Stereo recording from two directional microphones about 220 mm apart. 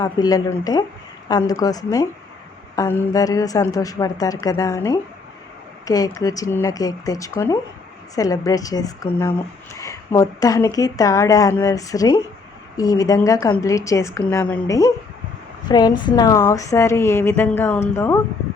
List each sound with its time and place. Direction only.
0.0 s speech: 15° left (ahead or behind)